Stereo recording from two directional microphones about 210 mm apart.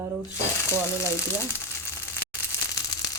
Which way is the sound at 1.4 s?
10° left (ahead or behind).